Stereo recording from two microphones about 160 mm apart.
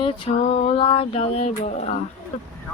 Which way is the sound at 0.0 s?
35° left (ahead or behind).